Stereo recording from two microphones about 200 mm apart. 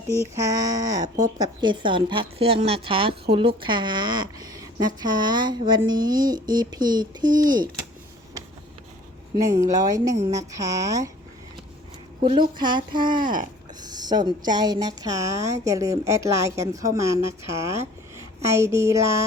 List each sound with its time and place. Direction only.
0.1 s a woman's voice: 15° right (ahead or behind)
9.3 s a woman's voice: 15° right (ahead or behind)
12.5 s speech: 20° right (ahead or behind)
13.2 s speech: 40° right (ahead or behind)
13.8 s a woman's voice: 20° right (ahead or behind)